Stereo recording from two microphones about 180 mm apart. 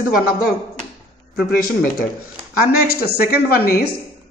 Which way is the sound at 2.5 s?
55° left (ahead or behind).